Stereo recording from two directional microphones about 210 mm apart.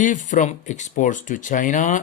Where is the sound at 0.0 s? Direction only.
35° left (ahead or behind).